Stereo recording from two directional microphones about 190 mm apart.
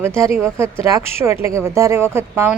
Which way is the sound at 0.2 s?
10° right (ahead or behind).